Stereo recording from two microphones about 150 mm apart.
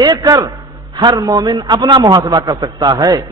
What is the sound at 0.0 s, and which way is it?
A man's voice, 25° right (ahead or behind).